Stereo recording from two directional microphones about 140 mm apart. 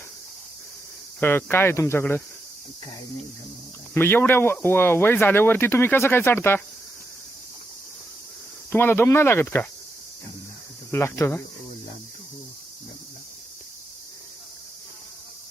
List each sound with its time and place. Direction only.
1.2 s speech: 15° left (ahead or behind)
3.9 s speech: 15° left (ahead or behind)
8.7 s speech: 15° left (ahead or behind)
10.9 s speech: 20° left (ahead or behind)